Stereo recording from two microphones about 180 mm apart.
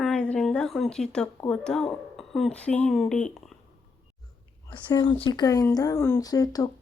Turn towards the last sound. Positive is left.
turn(degrees=20)  # may be behind; listen again after turning